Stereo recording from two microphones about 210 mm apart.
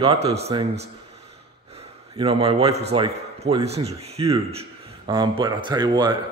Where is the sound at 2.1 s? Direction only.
25° right (ahead or behind).